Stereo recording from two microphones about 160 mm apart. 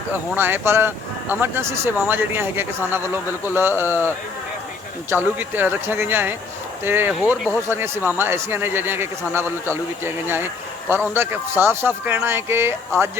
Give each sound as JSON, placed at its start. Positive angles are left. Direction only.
{"t": 0.1, "sound": "a man's voice", "side_deg": -15}
{"t": 5.1, "sound": "a man's voice", "side_deg": -10}
{"t": 7.2, "sound": "speech", "side_deg": 0}
{"t": 7.7, "sound": "a man's voice", "side_deg": -15}